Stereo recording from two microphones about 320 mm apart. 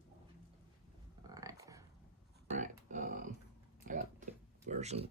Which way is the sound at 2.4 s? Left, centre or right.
Right.